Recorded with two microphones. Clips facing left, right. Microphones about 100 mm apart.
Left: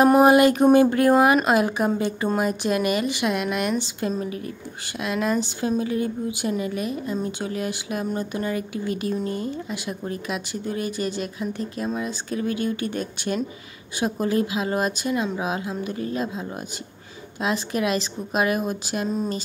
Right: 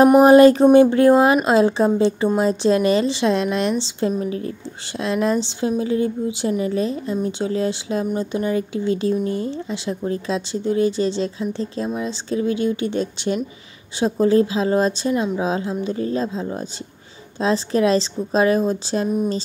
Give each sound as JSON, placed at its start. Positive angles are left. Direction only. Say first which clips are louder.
{"t": 0.2, "sound": "a woman's voice", "louder": "right 5 dB", "side_deg": -30}